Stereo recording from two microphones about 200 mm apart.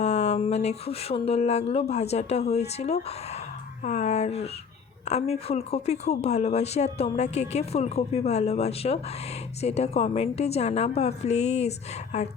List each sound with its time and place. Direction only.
0.0 s speech: 35° left (ahead or behind)